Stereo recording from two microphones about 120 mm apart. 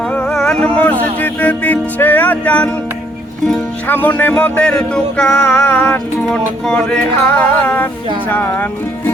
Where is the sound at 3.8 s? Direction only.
15° left (ahead or behind).